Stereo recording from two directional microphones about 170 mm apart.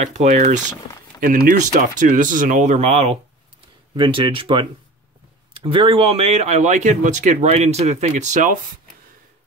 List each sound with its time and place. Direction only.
0.0 s speech: 40° right (ahead or behind)
1.2 s speech: 60° right (ahead or behind); by 3.2 s 40° right (ahead or behind)
3.9 s speech: 30° right (ahead or behind); by 8.5 s 45° right (ahead or behind)